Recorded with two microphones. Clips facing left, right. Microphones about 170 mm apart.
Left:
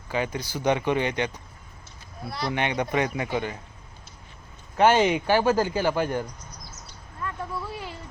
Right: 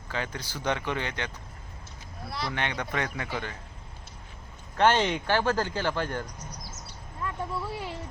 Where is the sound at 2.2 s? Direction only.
Centre (ahead or behind).